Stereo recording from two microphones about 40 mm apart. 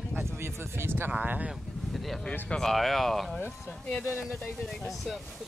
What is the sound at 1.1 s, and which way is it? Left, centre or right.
Speech, right.